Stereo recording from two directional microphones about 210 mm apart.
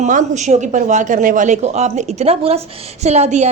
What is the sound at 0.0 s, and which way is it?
A woman's voice, 35° right (ahead or behind).